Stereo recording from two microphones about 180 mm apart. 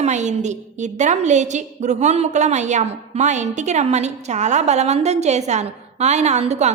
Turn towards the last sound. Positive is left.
turn(degrees=-40)  # may be behind; listen again after turning